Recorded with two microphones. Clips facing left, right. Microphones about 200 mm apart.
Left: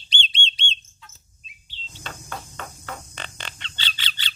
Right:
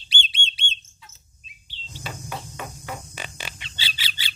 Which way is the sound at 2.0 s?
10° right (ahead or behind).